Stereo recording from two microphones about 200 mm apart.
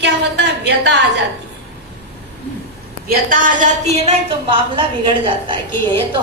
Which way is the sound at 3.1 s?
45° right (ahead or behind).